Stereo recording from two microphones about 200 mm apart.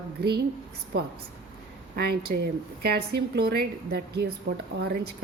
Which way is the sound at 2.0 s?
50° right (ahead or behind).